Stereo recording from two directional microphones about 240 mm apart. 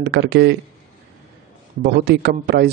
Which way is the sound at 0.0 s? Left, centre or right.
Right.